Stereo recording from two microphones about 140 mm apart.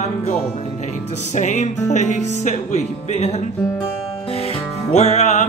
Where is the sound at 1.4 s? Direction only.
55° left (ahead or behind).